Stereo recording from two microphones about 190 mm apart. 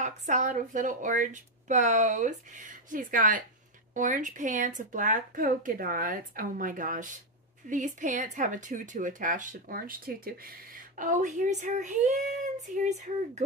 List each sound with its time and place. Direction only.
0.0 s speech: 40° right (ahead or behind)